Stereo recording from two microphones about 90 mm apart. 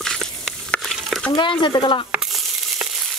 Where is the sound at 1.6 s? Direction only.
65° left (ahead or behind).